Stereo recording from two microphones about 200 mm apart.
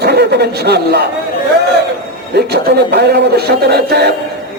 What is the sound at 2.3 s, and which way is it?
A man's voice, 55° right (ahead or behind).